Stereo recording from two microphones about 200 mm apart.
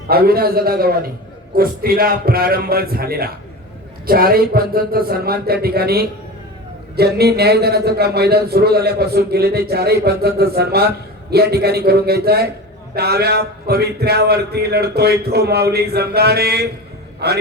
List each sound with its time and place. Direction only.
0.1 s a man's voice: 50° right (ahead or behind)
17.2 s music: 55° right (ahead or behind)